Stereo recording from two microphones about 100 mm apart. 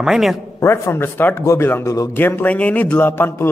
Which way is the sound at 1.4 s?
30° left (ahead or behind).